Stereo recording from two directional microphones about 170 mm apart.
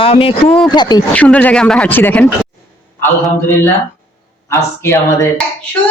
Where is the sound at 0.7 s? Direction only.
25° left (ahead or behind).